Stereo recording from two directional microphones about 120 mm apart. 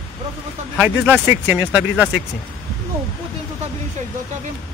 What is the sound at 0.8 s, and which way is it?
Speech, 15° right (ahead or behind).